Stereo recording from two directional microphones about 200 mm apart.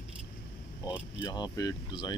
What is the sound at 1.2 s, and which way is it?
Speech, 20° left (ahead or behind).